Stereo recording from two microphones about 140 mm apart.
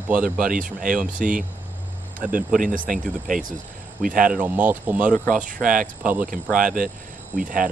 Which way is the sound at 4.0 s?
80° right.